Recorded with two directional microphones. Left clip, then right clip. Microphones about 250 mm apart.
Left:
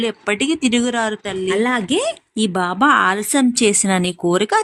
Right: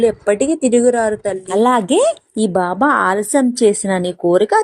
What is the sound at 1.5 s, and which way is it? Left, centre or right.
Speech, centre.